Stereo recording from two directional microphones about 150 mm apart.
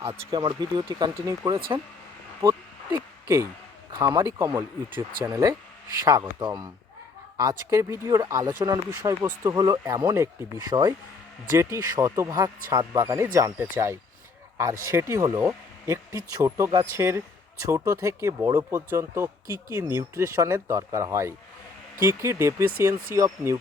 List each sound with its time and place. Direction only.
0.3 s speech: 30° right (ahead or behind)
1.5 s speech: 35° right (ahead or behind)
2.4 s a sound: 20° right (ahead or behind)
3.9 s speech: 25° right (ahead or behind)